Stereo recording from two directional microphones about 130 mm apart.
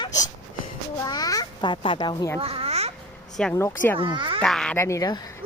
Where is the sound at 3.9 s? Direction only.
40° right (ahead or behind).